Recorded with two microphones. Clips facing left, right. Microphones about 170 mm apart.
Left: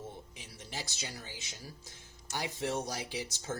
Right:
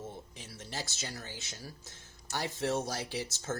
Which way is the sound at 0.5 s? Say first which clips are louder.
Right 2 dB; 15° left (ahead or behind).